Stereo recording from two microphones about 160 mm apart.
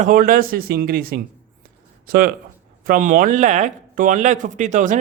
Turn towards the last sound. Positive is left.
turn(degrees=-50)  # may be behind; listen again after turning